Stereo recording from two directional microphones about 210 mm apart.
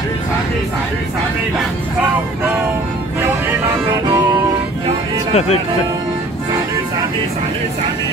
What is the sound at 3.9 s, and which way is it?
Music, 15° right (ahead or behind).